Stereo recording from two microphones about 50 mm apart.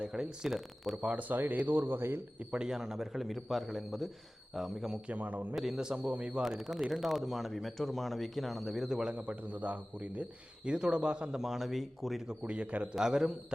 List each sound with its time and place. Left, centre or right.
0.0 s speech: centre
1.0 s speech: right
2.4 s a man's voice: right
2.6 s speech: centre
5.0 s a man's voice: right
5.5 s speech: centre
5.8 s speech: centre
6.1 s a man's voice: right
6.4 s speech: centre
9.1 s a man's voice: right; by 12.2 s centre
12.3 s a man's voice: right
13.0 s speech: centre